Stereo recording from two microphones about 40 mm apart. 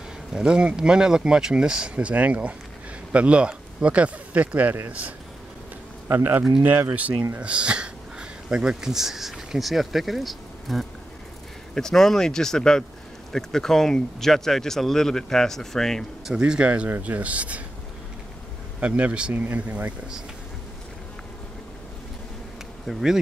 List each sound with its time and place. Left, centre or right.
0.3 s speech: centre
2.1 s speech: right
6.1 s speech: right
6.6 s speech: right; by 10.9 s centre
11.7 s speech: centre
16.3 s speech: right
18.8 s speech: right
19.3 s speech: right
22.9 s speech: centre